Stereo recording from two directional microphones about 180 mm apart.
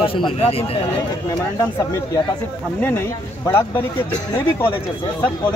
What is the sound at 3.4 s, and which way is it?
Speech, 15° left (ahead or behind).